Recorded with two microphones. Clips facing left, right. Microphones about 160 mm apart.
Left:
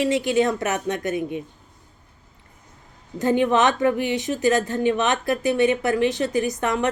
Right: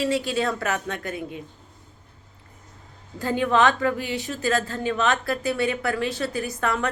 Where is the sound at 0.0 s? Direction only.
20° left (ahead or behind).